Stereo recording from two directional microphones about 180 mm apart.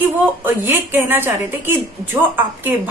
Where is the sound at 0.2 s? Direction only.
10° right (ahead or behind).